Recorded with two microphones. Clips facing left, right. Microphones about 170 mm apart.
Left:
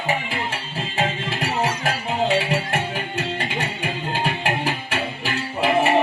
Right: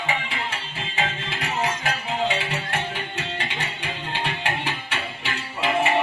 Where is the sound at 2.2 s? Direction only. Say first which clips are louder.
Left 6 dB; 40° left (ahead or behind).